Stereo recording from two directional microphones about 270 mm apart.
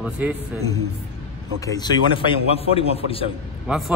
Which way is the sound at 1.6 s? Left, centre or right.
Centre.